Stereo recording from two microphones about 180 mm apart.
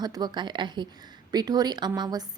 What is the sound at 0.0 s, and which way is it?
A woman's voice, 20° right (ahead or behind).